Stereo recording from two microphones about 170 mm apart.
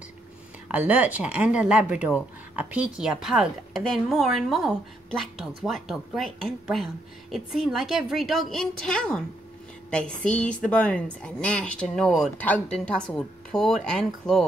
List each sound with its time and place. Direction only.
0.7 s a woman's voice: 10° right (ahead or behind)